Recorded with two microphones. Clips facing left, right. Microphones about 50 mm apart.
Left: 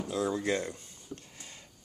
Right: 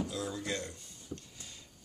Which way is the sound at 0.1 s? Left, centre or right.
Left.